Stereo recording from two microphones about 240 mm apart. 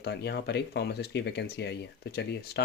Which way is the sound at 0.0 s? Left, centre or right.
Left.